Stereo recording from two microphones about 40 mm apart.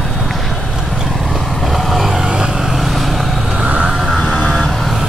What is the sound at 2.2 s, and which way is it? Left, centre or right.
Vehicle, centre.